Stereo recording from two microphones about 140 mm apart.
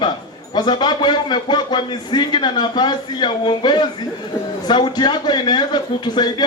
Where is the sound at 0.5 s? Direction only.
30° left (ahead or behind).